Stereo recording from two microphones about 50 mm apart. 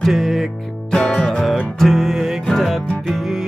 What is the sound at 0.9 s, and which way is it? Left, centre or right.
Music, centre.